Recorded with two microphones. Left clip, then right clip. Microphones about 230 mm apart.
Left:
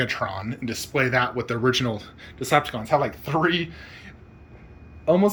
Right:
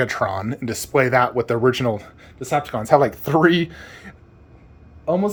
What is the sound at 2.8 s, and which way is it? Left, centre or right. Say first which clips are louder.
Speech: right 7 dB; right.